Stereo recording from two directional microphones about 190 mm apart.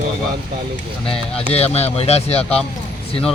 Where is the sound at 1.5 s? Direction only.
35° left (ahead or behind).